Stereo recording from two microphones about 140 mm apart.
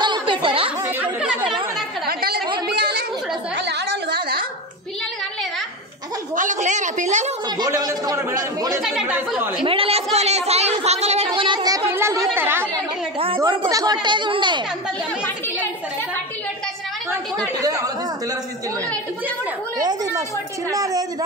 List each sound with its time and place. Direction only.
0.0 s a sound: 35° right (ahead or behind)
0.7 s chatter: 15° right (ahead or behind)
2.0 s a sound: 90° right
6.3 s a woman's voice: 65° right (ahead or behind)
7.4 s speech: 25° right (ahead or behind)
8.8 s speech: 5° right (ahead or behind)
9.6 s a child's voice: 40° right (ahead or behind)
11.4 s a child's voice: 30° right (ahead or behind)
11.9 s speech: 20° right (ahead or behind)
14.0 s a child's voice: 35° right (ahead or behind)
17.6 s speech: 25° right (ahead or behind)
19.8 s speech: 30° right (ahead or behind)